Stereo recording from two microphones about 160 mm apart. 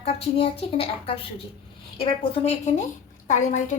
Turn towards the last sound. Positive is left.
turn(degrees=50)  # may be behind; listen again after turning